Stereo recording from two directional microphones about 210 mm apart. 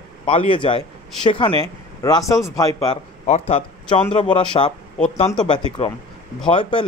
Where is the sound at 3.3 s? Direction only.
30° left (ahead or behind).